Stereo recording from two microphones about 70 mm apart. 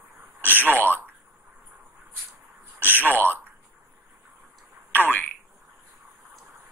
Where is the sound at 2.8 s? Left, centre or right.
Right.